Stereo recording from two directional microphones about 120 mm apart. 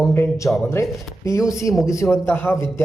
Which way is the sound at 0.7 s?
25° left (ahead or behind).